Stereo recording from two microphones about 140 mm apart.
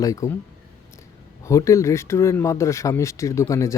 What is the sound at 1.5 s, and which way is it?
Speech, 20° left (ahead or behind).